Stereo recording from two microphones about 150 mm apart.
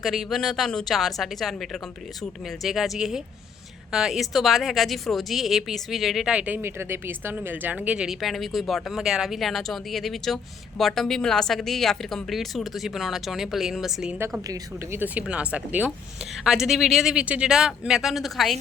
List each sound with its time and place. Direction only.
0.0 s speech: centre (ahead or behind)
14.4 s a woman's voice: 25° right (ahead or behind)
15.0 s speech: 10° right (ahead or behind)